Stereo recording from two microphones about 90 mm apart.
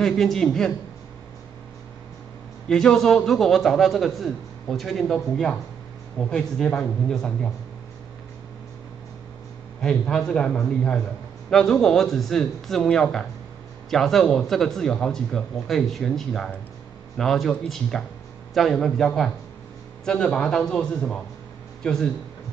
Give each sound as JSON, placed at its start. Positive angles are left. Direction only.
{"t": 0.0, "sound": "a man's voice", "side_deg": 5}
{"t": 2.7, "sound": "a man's voice", "side_deg": 5}
{"t": 9.8, "sound": "a man's voice", "side_deg": 5}